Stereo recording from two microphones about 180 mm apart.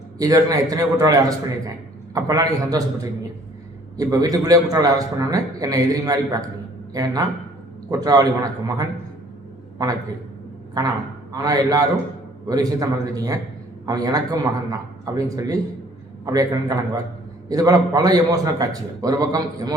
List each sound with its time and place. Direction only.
0.2 s a man's voice: 20° right (ahead or behind)
10.8 s a man's voice: 20° right (ahead or behind)